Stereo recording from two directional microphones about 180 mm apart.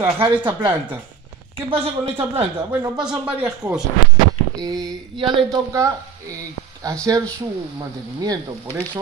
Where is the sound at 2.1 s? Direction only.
30° right (ahead or behind).